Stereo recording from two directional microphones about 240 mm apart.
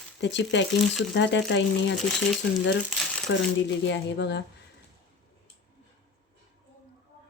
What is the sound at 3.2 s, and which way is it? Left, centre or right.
Speech, left.